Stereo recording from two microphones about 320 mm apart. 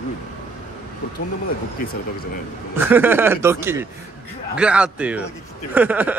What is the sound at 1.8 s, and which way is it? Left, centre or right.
Speech, left.